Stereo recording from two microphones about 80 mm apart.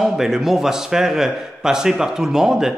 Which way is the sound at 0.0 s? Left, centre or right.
Centre.